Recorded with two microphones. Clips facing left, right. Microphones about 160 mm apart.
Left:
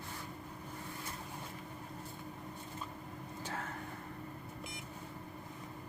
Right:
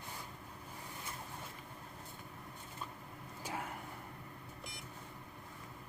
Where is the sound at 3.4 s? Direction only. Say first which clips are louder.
Right 1 dB; 10° right (ahead or behind).